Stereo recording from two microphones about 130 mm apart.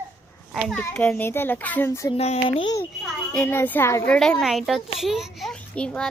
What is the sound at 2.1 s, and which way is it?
Speech, 55° left (ahead or behind).